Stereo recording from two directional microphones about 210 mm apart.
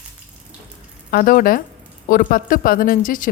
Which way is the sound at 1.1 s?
40° left (ahead or behind).